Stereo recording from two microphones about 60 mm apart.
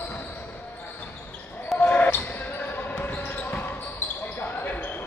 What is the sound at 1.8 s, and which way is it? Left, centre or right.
Basketball bounce, left.